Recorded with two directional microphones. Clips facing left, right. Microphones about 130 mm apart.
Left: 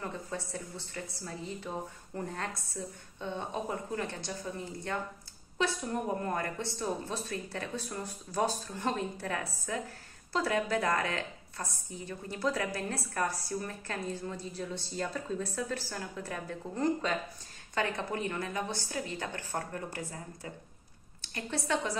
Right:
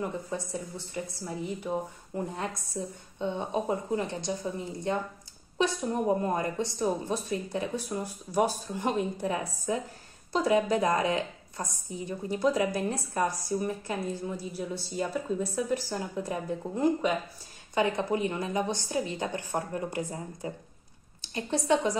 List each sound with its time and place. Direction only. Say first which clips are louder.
0.0 s a woman's voice: right 5 dB; 15° right (ahead or behind)